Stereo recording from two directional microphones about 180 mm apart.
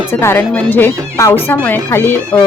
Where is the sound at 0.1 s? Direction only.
15° left (ahead or behind).